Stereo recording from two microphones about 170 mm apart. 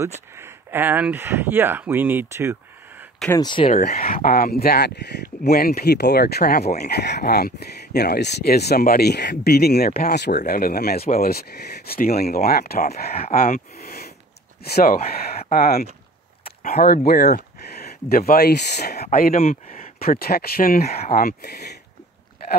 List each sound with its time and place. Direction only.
0.4 s speech: 10° right (ahead or behind)
3.3 s speech: 25° left (ahead or behind)
4.0 s speech: 60° left (ahead or behind)
19.1 s speech: 60° left (ahead or behind); by 21.7 s 75° left (ahead or behind)